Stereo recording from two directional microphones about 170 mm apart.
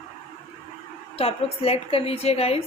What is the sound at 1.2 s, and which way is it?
Speech, 35° left (ahead or behind).